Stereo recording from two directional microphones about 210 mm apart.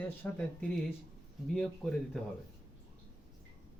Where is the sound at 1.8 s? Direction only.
Centre (ahead or behind).